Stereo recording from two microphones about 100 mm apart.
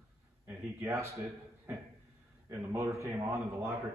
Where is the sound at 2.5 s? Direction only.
30° right (ahead or behind).